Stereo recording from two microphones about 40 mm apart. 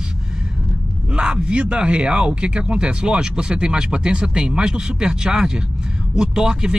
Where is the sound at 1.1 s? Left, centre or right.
Right.